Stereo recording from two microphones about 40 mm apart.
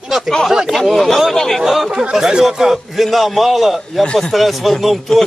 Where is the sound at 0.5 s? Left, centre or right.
Centre.